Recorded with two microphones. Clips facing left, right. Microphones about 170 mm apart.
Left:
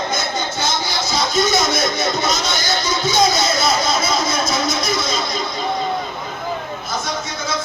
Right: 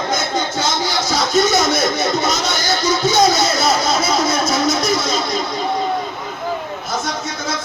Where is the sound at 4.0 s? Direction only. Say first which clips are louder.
Right 3 dB; 65° right (ahead or behind).